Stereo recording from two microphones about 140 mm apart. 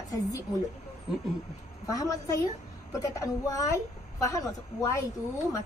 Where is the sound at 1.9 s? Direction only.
25° left (ahead or behind).